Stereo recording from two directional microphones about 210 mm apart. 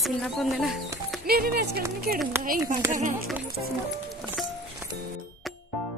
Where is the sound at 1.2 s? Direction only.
50° right (ahead or behind).